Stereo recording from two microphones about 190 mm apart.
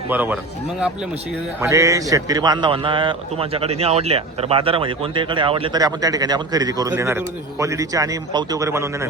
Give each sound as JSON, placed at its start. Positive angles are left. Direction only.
{"t": 0.1, "sound": "a man's voice", "side_deg": -10}
{"t": 1.7, "sound": "a man's voice", "side_deg": -15}